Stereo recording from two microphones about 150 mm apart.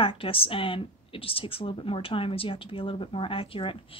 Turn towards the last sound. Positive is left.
turn(degrees=35)  # may be behind; listen again after turning